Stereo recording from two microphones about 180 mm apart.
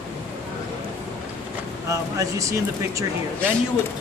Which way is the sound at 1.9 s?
20° right (ahead or behind).